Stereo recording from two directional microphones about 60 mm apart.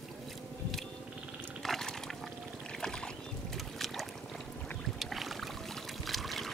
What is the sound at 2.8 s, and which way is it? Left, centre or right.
Rowboat, centre.